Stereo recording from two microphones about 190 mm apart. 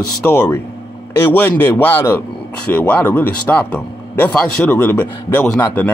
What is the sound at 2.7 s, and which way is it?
Speech, 10° left (ahead or behind).